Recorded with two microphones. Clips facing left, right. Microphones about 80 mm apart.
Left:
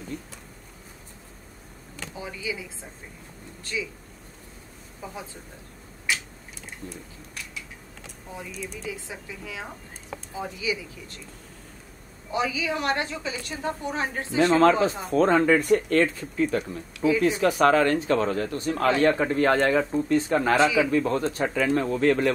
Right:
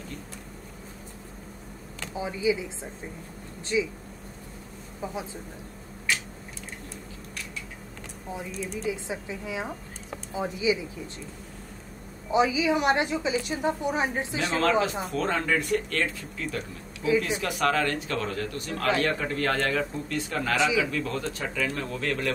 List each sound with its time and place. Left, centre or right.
2.1 s speech: right
5.0 s speech: centre
8.8 s speech: right
12.3 s a woman's voice: centre
14.3 s speech: left